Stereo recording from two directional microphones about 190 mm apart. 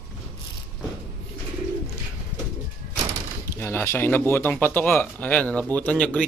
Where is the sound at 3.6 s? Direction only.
15° left (ahead or behind).